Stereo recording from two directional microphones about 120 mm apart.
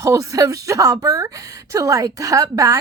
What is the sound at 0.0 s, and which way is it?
A woman's voice, 25° right (ahead or behind).